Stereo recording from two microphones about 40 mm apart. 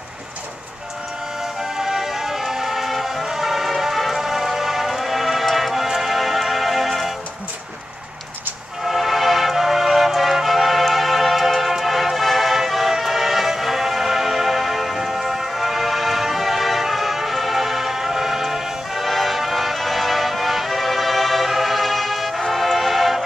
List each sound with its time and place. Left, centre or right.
1.4 s music: centre
8.8 s music: centre